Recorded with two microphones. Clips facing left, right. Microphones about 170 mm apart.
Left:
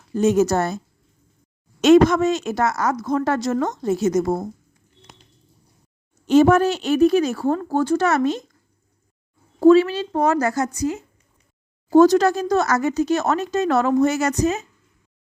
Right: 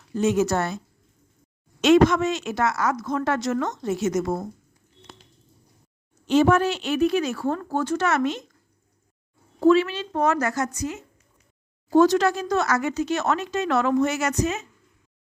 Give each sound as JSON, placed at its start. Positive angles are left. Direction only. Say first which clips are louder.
{"t": 0.1, "sound": "speech", "louder": "left 4 dB", "side_deg": 40}
{"t": 1.8, "sound": "speech", "louder": "left 4 dB", "side_deg": 40}
{"t": 6.2, "sound": "speech", "louder": "left 4 dB", "side_deg": 45}
{"t": 9.6, "sound": "speech", "louder": "left 5 dB", "side_deg": 35}